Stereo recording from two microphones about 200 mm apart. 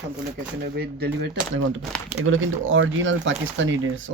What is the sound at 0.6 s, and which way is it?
Speech, 50° right (ahead or behind).